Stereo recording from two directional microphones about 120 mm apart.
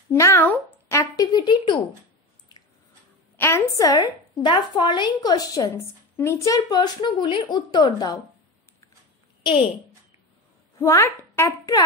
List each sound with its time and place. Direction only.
0.1 s speech: 20° left (ahead or behind)
0.8 s a sound: 25° left (ahead or behind)
3.3 s a woman's voice: 20° left (ahead or behind)
9.4 s a child's voice: 45° left (ahead or behind)
10.8 s a woman's voice: 25° left (ahead or behind)